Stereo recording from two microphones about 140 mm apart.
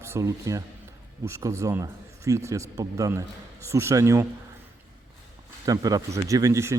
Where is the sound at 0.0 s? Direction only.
20° right (ahead or behind).